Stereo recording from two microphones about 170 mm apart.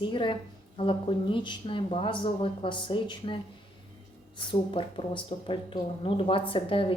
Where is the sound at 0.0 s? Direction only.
30° left (ahead or behind).